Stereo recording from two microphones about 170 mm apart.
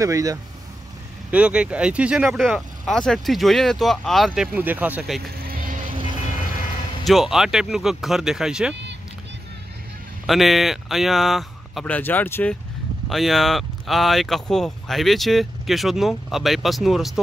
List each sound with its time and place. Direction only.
0.0 s speech: 20° right (ahead or behind)
1.3 s speech: 5° right (ahead or behind)
5.4 s vehicle: 55° right (ahead or behind)
7.1 s speech: centre (ahead or behind)
10.2 s speech: centre (ahead or behind)